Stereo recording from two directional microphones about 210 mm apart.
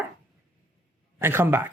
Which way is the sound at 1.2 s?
10° right (ahead or behind).